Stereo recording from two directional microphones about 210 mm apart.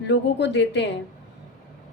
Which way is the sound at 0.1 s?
55° left (ahead or behind).